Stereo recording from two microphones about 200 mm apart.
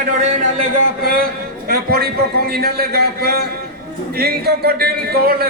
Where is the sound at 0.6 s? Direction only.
45° right (ahead or behind).